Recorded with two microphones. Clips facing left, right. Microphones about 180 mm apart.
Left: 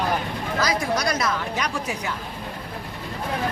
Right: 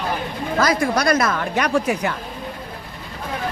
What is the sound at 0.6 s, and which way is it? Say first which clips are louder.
A woman's voice: right 5 dB; 55° right (ahead or behind).